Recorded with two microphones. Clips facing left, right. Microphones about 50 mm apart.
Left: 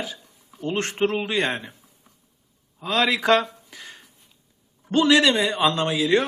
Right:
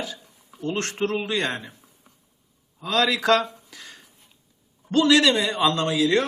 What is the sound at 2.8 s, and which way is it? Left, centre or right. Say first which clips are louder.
A man's voice: even; centre.